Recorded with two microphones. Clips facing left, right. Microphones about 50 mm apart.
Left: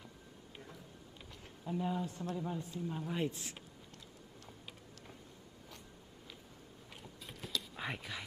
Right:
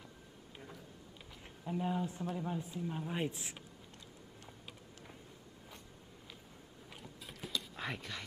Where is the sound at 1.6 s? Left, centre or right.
Centre.